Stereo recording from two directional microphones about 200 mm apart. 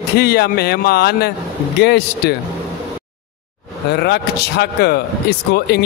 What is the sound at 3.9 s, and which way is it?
Speech, 55° left (ahead or behind).